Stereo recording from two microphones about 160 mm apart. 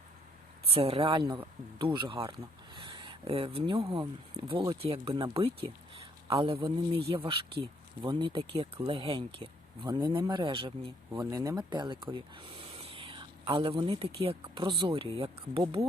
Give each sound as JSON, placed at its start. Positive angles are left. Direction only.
{"t": 0.7, "sound": "a man's voice", "side_deg": -40}